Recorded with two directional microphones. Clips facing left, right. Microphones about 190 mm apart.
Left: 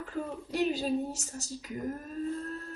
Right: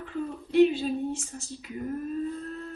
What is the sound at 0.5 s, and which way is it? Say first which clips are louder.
Speech: right 7 dB; 40° left (ahead or behind).